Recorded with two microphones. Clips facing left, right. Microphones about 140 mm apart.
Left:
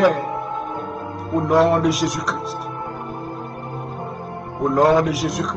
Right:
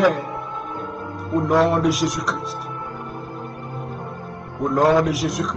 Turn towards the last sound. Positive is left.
turn(degrees=0)  # may be behind; listen again after turning